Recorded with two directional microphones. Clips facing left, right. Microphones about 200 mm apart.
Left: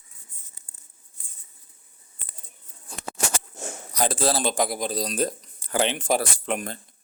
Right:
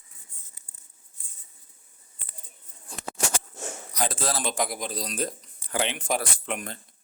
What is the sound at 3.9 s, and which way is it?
Speech, 35° left (ahead or behind).